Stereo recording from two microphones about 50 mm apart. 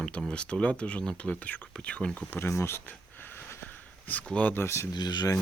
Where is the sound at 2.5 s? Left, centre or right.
Left.